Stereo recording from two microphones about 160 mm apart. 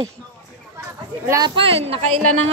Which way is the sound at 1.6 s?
35° right (ahead or behind).